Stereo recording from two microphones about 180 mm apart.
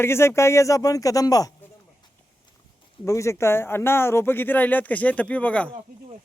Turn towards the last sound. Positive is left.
turn(degrees=5)  # may be behind; listen again after turning